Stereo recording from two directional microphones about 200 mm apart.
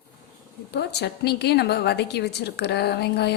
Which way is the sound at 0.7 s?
55° left (ahead or behind).